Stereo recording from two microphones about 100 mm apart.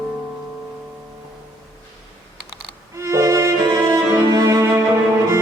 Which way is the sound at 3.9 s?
25° right (ahead or behind).